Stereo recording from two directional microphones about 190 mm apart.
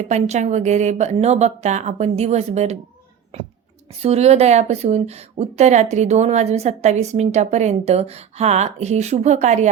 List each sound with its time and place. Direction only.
0.0 s a woman's voice: 35° right (ahead or behind)
4.0 s a woman's voice: 35° right (ahead or behind)